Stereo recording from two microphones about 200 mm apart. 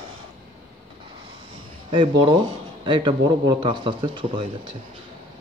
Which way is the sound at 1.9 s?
25° right (ahead or behind).